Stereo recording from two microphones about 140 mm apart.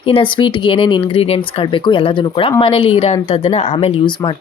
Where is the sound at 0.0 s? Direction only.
40° left (ahead or behind).